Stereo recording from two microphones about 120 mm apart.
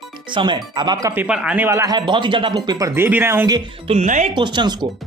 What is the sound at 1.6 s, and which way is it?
Speech, 25° right (ahead or behind).